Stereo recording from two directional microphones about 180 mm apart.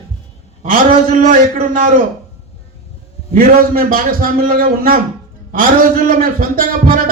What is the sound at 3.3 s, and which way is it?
A man's voice, 50° right (ahead or behind).